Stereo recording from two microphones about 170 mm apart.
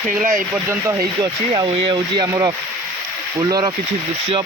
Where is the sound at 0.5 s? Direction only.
15° right (ahead or behind).